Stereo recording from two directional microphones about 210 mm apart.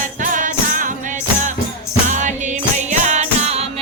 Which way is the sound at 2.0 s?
35° right (ahead or behind).